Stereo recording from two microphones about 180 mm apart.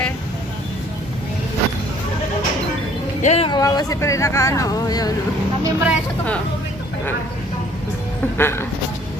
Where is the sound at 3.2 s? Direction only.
35° left (ahead or behind).